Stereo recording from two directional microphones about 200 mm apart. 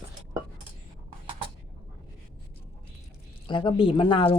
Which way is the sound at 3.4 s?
25° left (ahead or behind).